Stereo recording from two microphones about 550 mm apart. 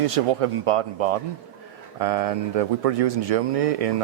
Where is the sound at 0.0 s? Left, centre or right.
Right.